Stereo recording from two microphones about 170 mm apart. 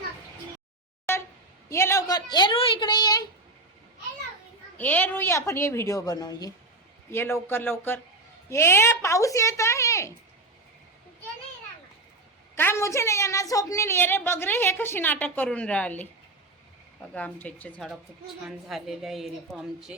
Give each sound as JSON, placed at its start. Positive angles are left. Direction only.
{"t": 1.1, "sound": "a sound", "side_deg": 15}
{"t": 1.7, "sound": "a woman's voice", "side_deg": 15}
{"t": 4.8, "sound": "a woman's voice", "side_deg": 10}
{"t": 12.5, "sound": "a woman's voice", "side_deg": 15}
{"t": 17.2, "sound": "a woman's voice", "side_deg": 10}